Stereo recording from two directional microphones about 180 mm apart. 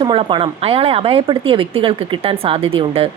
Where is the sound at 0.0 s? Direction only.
25° right (ahead or behind).